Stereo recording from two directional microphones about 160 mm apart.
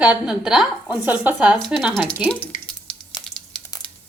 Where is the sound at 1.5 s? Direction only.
5° left (ahead or behind).